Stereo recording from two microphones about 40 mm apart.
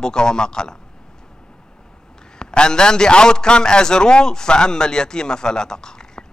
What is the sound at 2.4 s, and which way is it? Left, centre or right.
A man's voice, centre.